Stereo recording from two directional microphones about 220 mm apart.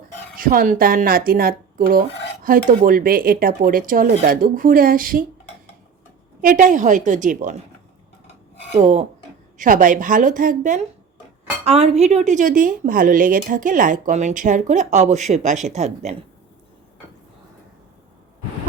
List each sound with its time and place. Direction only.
0.3 s a woman's voice: 40° right (ahead or behind)
6.4 s a woman's voice: 35° right (ahead or behind)
8.8 s a woman's voice: 30° right (ahead or behind)